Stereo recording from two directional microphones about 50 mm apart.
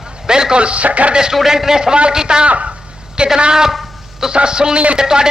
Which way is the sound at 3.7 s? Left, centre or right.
Centre.